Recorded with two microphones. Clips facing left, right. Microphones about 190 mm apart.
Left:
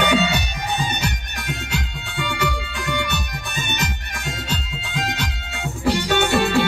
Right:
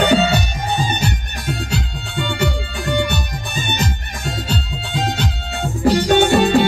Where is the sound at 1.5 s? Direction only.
30° right (ahead or behind).